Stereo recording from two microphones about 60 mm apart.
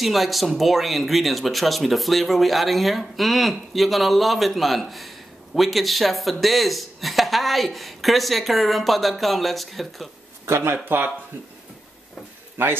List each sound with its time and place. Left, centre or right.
0.0 s speech: centre
10.4 s speech: right
12.6 s speech: right